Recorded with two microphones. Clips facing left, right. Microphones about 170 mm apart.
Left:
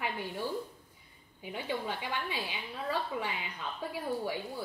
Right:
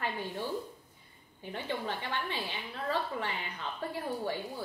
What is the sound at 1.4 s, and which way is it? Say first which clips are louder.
A woman's voice: even; 10° left (ahead or behind).